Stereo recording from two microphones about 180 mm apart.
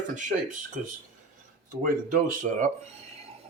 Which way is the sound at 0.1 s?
45° right (ahead or behind).